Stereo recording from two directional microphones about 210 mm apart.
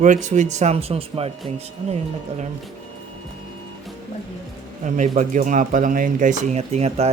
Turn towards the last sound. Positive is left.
turn(degrees=-30)  # may be behind; listen again after turning